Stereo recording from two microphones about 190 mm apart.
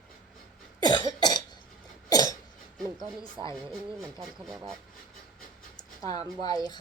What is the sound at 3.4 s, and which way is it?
Speech, 20° right (ahead or behind).